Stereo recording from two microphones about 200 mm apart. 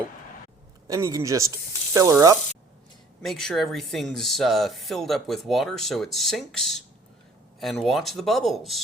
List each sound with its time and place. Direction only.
0.9 s speech: 15° right (ahead or behind)
3.2 s speech: centre (ahead or behind)